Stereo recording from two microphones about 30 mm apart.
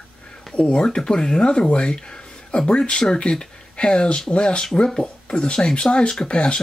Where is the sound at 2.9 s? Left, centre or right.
Left.